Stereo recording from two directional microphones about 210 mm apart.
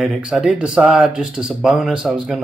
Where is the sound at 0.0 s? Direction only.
Centre (ahead or behind).